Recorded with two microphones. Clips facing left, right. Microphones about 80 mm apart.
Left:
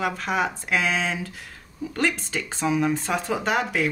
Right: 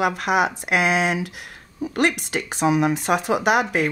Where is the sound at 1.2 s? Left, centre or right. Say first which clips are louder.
Right 4 dB; right.